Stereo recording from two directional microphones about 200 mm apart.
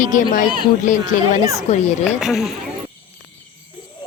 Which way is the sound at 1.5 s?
35° left (ahead or behind).